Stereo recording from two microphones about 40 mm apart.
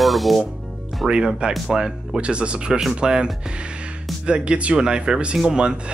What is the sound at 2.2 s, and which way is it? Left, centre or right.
Speech, right.